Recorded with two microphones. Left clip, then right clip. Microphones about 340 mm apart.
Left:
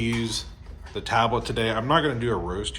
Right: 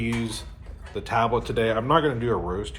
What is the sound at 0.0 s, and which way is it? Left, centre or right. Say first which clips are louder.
Speech: left 2 dB; centre.